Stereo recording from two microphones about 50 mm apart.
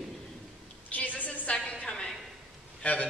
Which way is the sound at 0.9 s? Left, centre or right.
Left.